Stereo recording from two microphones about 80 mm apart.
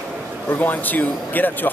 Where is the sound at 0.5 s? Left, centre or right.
Left.